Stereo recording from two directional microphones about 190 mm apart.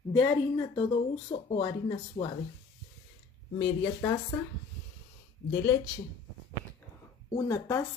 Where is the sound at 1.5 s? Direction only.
25° left (ahead or behind).